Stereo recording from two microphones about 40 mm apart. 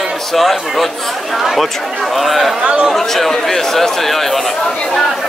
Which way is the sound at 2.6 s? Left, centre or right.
Right.